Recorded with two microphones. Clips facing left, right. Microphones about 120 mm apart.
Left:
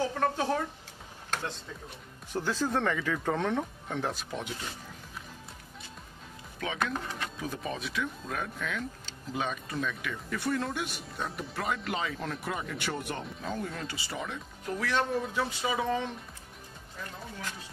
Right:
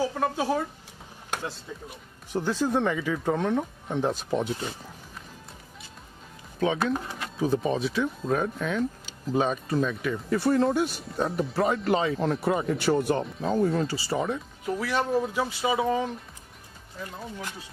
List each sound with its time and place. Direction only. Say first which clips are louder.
0.0 s speech: right 2 dB; 10° right (ahead or behind)
4.2 s speech: right 10 dB; 30° right (ahead or behind)
6.8 s speech: right 5 dB; 5° right (ahead or behind)
7.3 s speech: right 15 dB; 30° right (ahead or behind)
14.6 s speech: right 1 dB; 5° right (ahead or behind)